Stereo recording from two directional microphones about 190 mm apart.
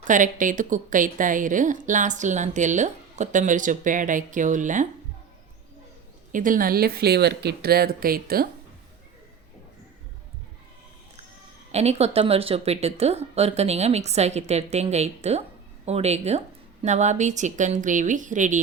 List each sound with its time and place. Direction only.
0.1 s a woman's voice: 45° right (ahead or behind)
6.3 s speech: 45° right (ahead or behind)
11.7 s a woman's voice: 35° right (ahead or behind)